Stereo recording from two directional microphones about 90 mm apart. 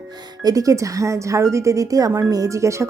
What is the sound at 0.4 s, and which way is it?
Speech, 40° right (ahead or behind).